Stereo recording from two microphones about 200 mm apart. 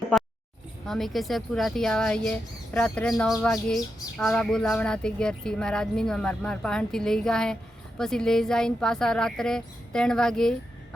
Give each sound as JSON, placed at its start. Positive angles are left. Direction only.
{"t": 0.9, "sound": "speech", "side_deg": 0}